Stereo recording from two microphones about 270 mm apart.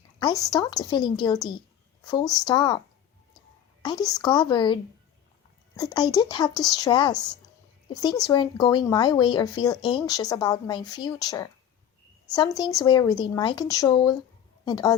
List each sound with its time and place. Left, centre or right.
0.2 s speech: centre
3.8 s speech: centre